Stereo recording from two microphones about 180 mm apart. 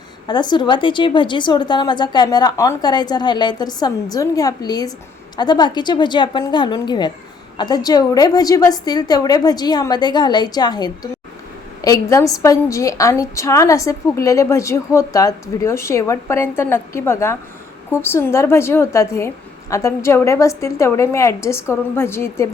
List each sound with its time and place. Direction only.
0.3 s a woman's voice: 25° left (ahead or behind)